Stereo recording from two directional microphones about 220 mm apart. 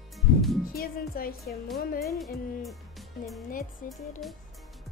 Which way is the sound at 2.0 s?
Centre (ahead or behind).